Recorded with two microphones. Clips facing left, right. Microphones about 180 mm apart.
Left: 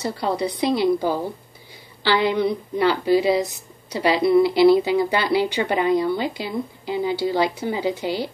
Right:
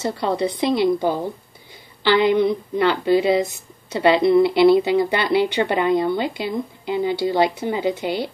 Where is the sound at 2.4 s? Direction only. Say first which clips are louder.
Right 1 dB; 55° right (ahead or behind).